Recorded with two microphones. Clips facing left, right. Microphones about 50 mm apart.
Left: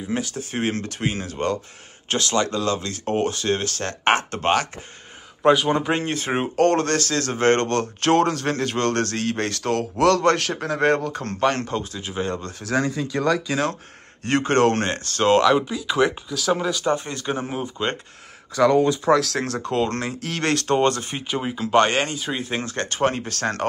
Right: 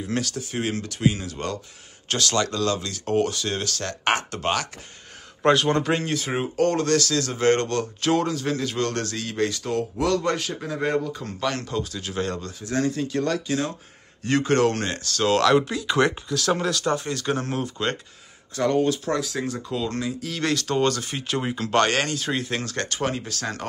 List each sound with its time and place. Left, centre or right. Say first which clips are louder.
0.1 s speech: left 1 dB; left
0.4 s speech: left 2 dB; left
5.4 s speech: left 2 dB; centre
5.9 s speech: left 2 dB; left
11.4 s speech: left 5 dB; left
14.2 s speech: left 2 dB; left
15.4 s speech: left 1 dB; centre
16.9 s speech: even; left
19.1 s speech: left 5 dB; left
19.7 s speech: left 5 dB; left
21.3 s speech: even; centre
21.7 s speech: left 3 dB; centre
22.6 s speech: left 4 dB; left